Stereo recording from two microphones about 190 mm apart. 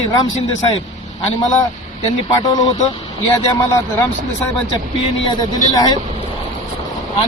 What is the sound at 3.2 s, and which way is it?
Speech, 15° left (ahead or behind).